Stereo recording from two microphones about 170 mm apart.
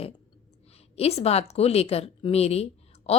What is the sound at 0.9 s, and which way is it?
A woman's voice, 35° left (ahead or behind).